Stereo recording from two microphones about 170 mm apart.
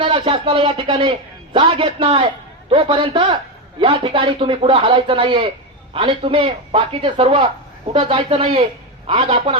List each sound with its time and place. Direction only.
0.0 s a man's voice: 30° right (ahead or behind)